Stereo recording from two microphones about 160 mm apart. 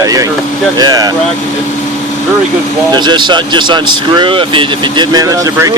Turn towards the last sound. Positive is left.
turn(degrees=-20)  # may be behind; listen again after turning